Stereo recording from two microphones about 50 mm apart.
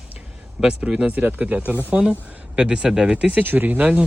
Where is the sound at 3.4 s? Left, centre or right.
Right.